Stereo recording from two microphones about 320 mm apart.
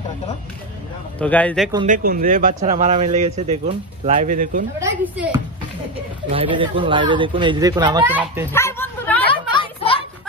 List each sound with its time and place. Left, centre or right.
1.2 s speech: centre
1.9 s speech: right
4.7 s speech: centre
6.3 s speech: centre
8.5 s bow-wow: centre